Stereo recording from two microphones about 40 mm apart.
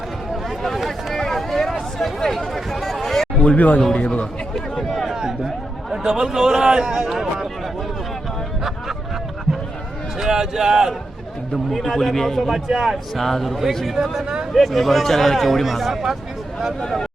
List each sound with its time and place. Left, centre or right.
0.6 s a sound: centre
3.4 s speech: left
3.9 s a man's voice: left
4.5 s a sound: centre
5.0 s a sound: centre
5.9 s a man's voice: centre
7.1 s a man's voice: centre
10.2 s a man's voice: centre
11.5 s speech: centre
12.7 s speech: centre
13.9 s a man's voice: centre